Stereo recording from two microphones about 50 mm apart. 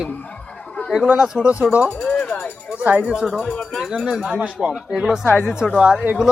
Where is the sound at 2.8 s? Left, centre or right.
Right.